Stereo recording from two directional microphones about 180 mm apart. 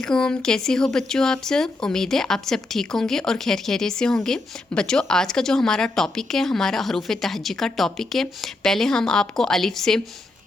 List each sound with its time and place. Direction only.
0.0 s speech: 5° left (ahead or behind)